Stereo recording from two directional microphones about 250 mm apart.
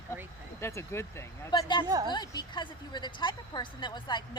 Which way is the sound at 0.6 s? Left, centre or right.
Centre.